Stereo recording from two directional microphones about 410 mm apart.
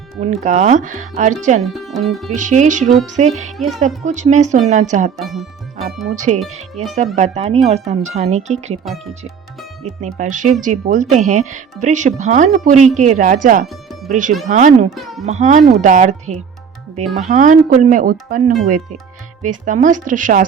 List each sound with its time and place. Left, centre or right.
0.2 s speech: centre
1.6 s speech: centre
2.3 s speech: centre
5.2 s speech: centre
6.1 s speech: centre
8.8 s speech: centre
10.2 s speech: centre
14.9 s speech: centre
15.3 s speech: centre